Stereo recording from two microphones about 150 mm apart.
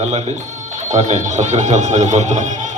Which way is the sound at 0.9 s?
50° right (ahead or behind).